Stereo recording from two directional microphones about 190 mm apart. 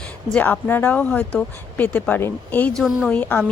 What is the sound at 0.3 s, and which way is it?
Speech, 10° left (ahead or behind).